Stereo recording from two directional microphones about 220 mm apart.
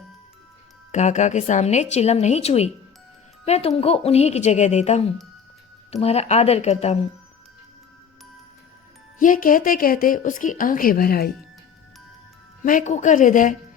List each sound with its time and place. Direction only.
0.9 s a woman's voice: 35° left (ahead or behind)
9.1 s speech: 40° left (ahead or behind)
12.6 s speech: 35° left (ahead or behind)